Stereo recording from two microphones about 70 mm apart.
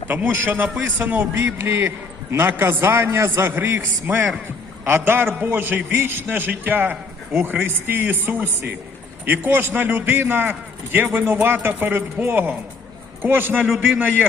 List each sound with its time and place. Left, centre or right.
0.1 s a man's voice: right